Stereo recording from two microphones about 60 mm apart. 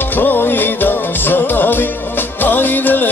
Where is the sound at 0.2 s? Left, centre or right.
Left.